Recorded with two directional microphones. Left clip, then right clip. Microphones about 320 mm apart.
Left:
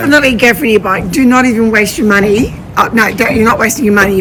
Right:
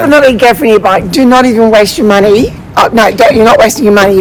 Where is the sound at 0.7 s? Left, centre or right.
Centre.